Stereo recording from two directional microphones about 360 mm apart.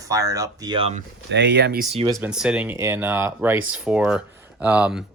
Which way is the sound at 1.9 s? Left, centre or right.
Centre.